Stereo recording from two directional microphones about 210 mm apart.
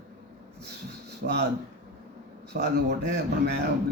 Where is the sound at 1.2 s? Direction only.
50° right (ahead or behind).